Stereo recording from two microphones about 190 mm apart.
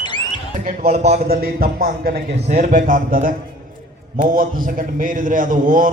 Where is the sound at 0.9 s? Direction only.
35° right (ahead or behind).